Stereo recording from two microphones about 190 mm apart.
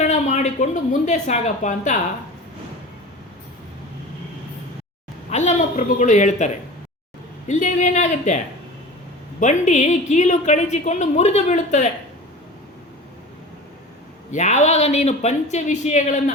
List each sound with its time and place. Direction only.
0.0 s speech: 40° left (ahead or behind)
5.3 s a woman's voice: 40° left (ahead or behind)
9.4 s a woman's voice: 40° left (ahead or behind)
14.3 s a woman's voice: 40° left (ahead or behind)